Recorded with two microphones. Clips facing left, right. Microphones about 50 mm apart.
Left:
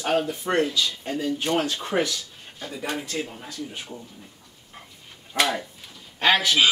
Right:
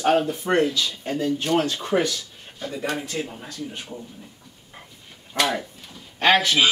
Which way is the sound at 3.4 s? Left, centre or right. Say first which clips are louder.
Right 1 dB; centre.